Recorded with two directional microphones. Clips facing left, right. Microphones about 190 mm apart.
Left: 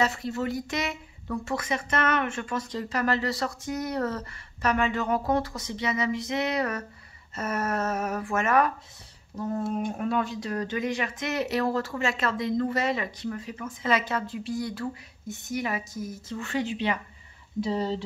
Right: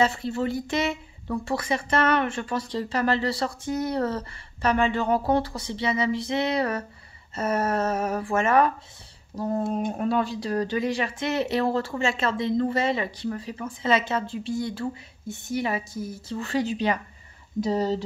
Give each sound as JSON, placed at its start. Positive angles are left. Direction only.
{"t": 0.0, "sound": "a woman's voice", "side_deg": -30}